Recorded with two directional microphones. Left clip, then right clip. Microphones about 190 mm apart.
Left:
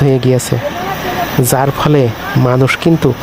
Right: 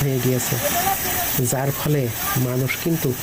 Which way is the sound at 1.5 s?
50° left (ahead or behind).